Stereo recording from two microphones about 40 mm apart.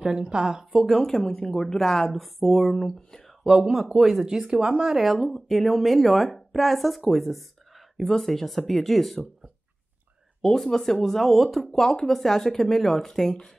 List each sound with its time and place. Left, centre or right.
0.0 s speech: right
1.0 s a woman's voice: centre
3.4 s speech: centre
4.3 s speech: centre
4.9 s speech: centre
10.4 s a woman's voice: centre
11.7 s a woman's voice: centre